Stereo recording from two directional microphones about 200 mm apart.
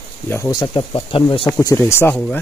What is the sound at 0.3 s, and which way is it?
Speech, 20° left (ahead or behind).